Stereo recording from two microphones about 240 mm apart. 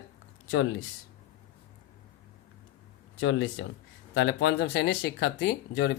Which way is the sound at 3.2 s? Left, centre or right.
Left.